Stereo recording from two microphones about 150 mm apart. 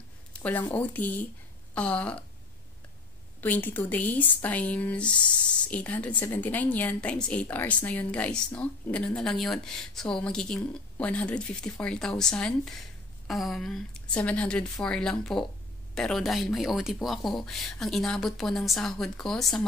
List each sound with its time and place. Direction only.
0.3 s a sound: 10° left (ahead or behind)
0.7 s a woman's voice: 10° left (ahead or behind)
3.3 s a woman's voice: 10° left (ahead or behind)